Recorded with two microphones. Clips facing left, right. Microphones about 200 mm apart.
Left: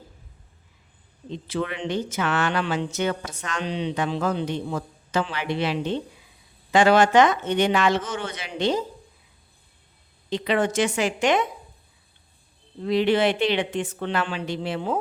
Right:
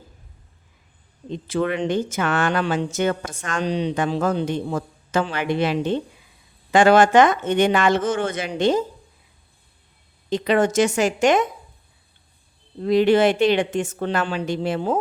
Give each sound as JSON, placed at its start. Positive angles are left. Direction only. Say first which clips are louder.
{"t": 1.3, "sound": "speech", "louder": "right 5 dB", "side_deg": -50}
{"t": 10.2, "sound": "speech", "louder": "right 4 dB", "side_deg": -45}
{"t": 12.8, "sound": "speech", "louder": "right 4 dB", "side_deg": -45}